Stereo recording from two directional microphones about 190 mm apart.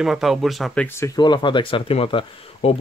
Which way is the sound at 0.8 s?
15° left (ahead or behind).